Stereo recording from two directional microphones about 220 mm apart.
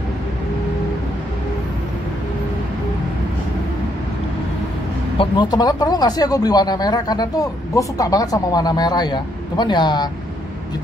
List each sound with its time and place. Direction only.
5.1 s speech: 20° left (ahead or behind)